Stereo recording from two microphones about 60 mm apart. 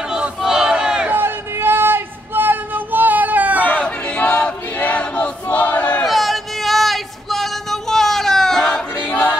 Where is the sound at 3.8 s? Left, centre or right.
Centre.